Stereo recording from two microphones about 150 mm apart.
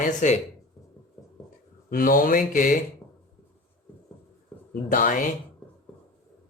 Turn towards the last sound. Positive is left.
turn(degrees=65)  # may be behind; listen again after turning